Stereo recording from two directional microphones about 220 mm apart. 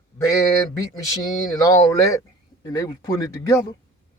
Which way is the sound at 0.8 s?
15° left (ahead or behind).